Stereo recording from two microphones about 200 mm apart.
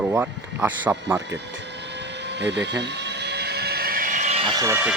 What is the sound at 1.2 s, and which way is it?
Vehicle, 60° right (ahead or behind).